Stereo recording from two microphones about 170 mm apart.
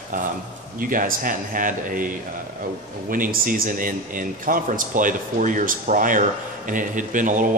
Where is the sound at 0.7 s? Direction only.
55° right (ahead or behind).